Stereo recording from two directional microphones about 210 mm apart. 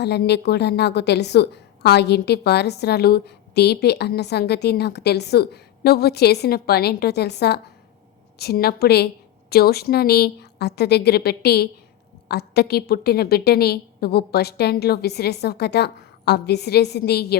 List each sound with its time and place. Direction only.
0.0 s a woman's voice: 50° left (ahead or behind)